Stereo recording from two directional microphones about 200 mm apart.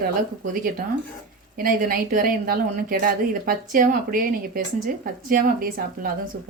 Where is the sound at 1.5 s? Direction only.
45° right (ahead or behind).